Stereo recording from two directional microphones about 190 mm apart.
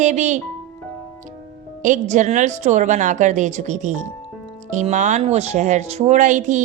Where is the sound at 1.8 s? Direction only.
40° right (ahead or behind).